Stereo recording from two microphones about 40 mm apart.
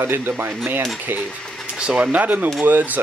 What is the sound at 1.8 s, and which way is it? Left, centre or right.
Speech, right.